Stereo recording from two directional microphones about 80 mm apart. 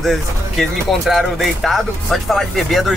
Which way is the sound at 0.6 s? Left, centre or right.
Centre.